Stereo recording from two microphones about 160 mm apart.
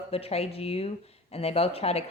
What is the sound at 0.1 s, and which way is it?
A woman's voice, 40° left (ahead or behind).